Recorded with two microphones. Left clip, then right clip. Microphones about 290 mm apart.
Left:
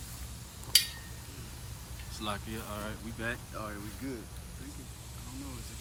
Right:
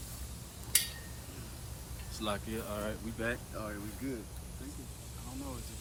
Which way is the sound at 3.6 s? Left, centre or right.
Centre.